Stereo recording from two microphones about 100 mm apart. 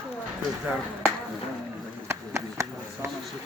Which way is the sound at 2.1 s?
30° right (ahead or behind).